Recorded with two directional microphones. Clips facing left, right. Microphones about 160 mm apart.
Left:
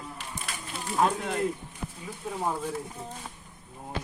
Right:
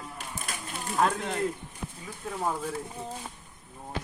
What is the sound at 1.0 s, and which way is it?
Speech, 5° left (ahead or behind).